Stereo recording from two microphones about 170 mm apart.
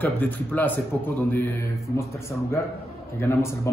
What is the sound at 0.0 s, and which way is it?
Speech, 10° left (ahead or behind).